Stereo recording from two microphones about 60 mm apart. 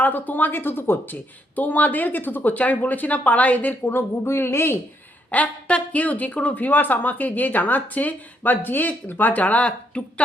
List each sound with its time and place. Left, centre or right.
0.0 s a woman's voice: left
3.8 s a woman's voice: left
5.3 s a woman's voice: left